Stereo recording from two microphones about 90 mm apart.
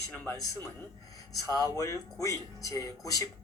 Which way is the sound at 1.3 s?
40° left (ahead or behind).